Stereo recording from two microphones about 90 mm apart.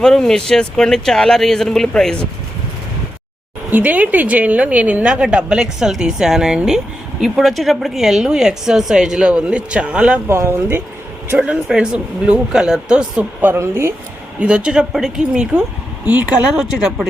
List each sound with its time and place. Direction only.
0.0 s speech: 5° left (ahead or behind)
3.7 s a woman's voice: 20° right (ahead or behind)
10.2 s speech: 25° right (ahead or behind)
11.3 s a woman's voice: 10° right (ahead or behind)
13.5 s speech: 30° right (ahead or behind)
14.3 s a woman's voice: 10° right (ahead or behind)